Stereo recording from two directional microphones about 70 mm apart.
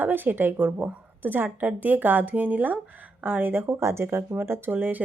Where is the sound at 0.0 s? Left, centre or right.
Right.